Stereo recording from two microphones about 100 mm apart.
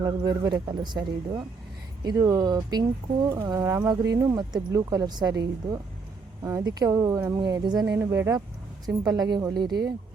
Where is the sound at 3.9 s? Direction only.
40° right (ahead or behind).